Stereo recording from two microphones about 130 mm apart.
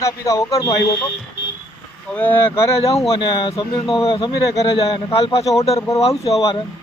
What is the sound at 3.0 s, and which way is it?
Speech, 40° left (ahead or behind).